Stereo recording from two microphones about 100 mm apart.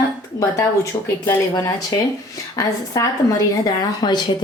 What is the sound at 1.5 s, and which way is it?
Speech, 40° left (ahead or behind).